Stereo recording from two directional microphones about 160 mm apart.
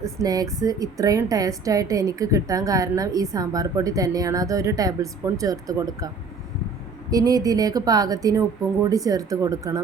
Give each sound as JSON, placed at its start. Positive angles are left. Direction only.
{"t": 0.0, "sound": "a woman's voice", "side_deg": -20}
{"t": 7.1, "sound": "a woman's voice", "side_deg": -25}